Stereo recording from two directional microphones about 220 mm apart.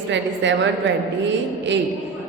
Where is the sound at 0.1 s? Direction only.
55° right (ahead or behind).